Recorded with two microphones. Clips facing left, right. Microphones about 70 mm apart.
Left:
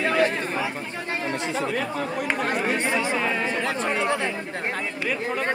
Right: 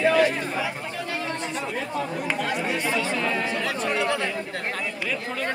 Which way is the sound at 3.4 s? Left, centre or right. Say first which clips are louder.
Left 1 dB; left.